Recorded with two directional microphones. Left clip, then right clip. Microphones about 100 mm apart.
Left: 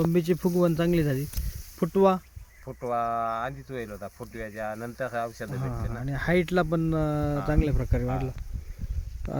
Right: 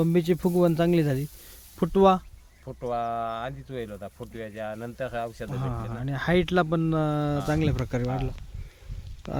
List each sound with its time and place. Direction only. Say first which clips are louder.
0.1 s speech: right 1 dB; 5° right (ahead or behind)
1.8 s speech: right 2 dB; 25° right (ahead or behind)
2.6 s speech: left 1 dB; 15° right (ahead or behind)